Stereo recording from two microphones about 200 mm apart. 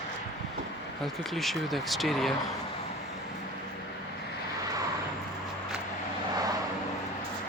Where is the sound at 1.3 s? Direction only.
Centre (ahead or behind).